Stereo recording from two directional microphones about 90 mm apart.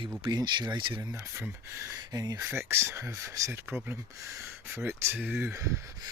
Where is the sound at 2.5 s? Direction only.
25° right (ahead or behind).